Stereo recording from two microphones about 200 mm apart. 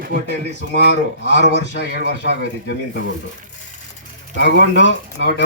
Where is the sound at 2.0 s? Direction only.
55° right (ahead or behind).